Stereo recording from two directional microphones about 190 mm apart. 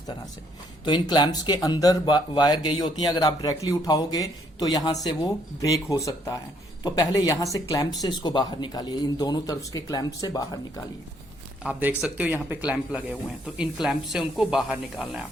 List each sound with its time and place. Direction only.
0.9 s speech: 25° left (ahead or behind)
11.6 s a man's voice: 10° right (ahead or behind)